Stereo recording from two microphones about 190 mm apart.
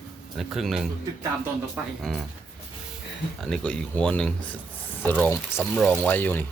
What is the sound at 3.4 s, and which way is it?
Speech, 5° left (ahead or behind).